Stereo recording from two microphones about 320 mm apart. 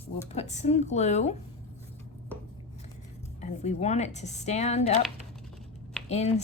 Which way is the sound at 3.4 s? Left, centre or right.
Left.